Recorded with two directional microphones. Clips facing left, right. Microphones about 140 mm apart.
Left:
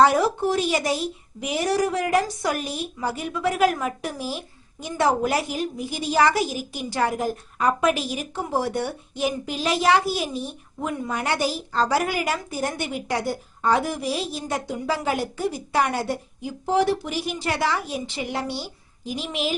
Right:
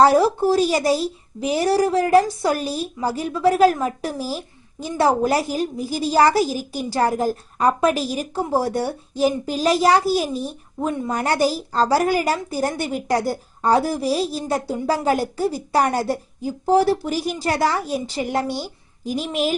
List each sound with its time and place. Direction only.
0.0 s a woman's voice: 35° right (ahead or behind)
10.8 s a woman's voice: 25° right (ahead or behind)
11.1 s a woman's voice: 40° right (ahead or behind)